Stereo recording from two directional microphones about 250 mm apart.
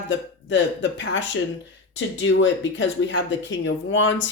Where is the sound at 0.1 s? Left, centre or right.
Left.